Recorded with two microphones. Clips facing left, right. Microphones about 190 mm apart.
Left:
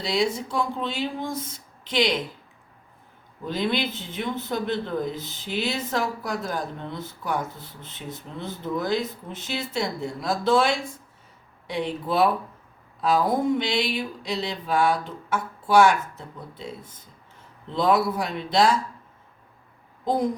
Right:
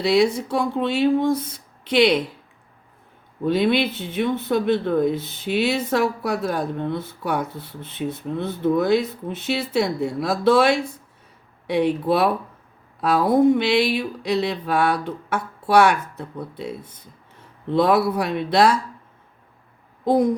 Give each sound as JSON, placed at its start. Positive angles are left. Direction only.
{"t": 0.0, "sound": "speech", "side_deg": -65}
{"t": 3.4, "sound": "speech", "side_deg": -60}